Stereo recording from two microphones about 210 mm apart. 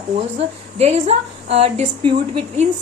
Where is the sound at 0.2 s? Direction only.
30° right (ahead or behind).